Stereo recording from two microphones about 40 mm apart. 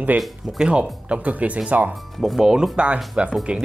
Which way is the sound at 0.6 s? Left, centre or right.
Right.